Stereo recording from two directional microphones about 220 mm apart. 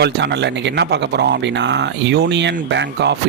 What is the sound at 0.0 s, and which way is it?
Speech, 50° right (ahead or behind).